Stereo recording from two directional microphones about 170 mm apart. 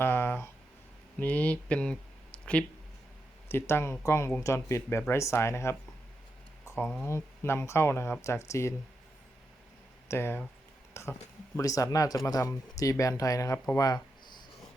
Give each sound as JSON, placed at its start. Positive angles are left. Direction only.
{"t": 0.0, "sound": "a sound", "side_deg": 10}
{"t": 1.2, "sound": "speech", "side_deg": 10}
{"t": 3.5, "sound": "speech", "side_deg": 15}
{"t": 7.0, "sound": "speech", "side_deg": 15}
{"t": 10.1, "sound": "speech", "side_deg": 15}